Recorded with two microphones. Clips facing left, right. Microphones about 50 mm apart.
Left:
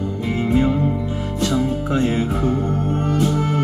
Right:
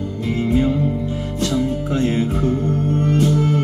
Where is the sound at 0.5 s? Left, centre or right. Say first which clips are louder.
Even; centre.